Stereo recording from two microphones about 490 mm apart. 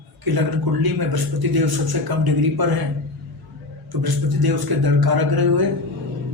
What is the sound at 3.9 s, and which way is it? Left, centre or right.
A man's voice, right.